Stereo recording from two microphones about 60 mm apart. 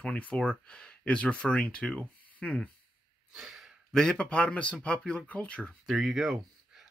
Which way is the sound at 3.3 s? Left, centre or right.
Centre.